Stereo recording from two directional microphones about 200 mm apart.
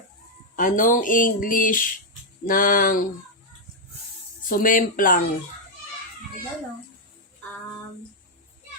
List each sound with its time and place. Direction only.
0.5 s speech: 40° left (ahead or behind)
4.4 s speech: 45° left (ahead or behind)